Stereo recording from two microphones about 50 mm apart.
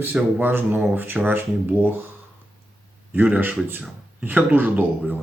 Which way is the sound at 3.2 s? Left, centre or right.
Right.